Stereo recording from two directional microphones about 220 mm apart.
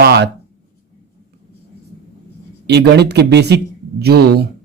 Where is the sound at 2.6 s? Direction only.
50° right (ahead or behind).